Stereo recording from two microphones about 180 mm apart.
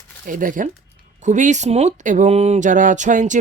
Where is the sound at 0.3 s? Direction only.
50° right (ahead or behind).